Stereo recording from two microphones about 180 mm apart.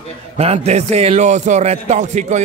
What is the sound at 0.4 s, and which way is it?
Speech, 35° right (ahead or behind).